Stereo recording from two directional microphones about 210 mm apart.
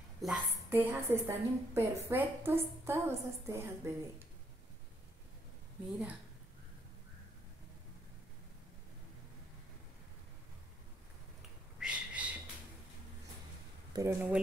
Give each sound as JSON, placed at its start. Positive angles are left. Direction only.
{"t": 0.2, "sound": "a woman's voice", "side_deg": -5}
{"t": 11.8, "sound": "a sound", "side_deg": -5}
{"t": 13.9, "sound": "a woman's voice", "side_deg": -10}